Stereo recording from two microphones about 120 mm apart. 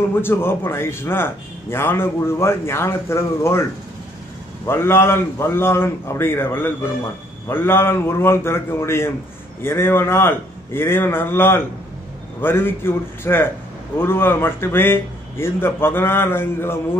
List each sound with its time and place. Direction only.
0.1 s speech: 20° left (ahead or behind)
4.6 s speech: 20° left (ahead or behind)